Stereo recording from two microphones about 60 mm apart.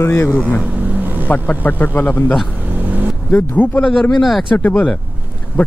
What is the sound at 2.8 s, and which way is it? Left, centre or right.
Vehicle, right.